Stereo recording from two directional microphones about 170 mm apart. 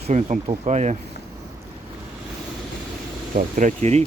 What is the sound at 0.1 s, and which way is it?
Speech, 45° right (ahead or behind).